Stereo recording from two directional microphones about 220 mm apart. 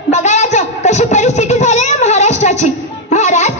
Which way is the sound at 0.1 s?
30° left (ahead or behind).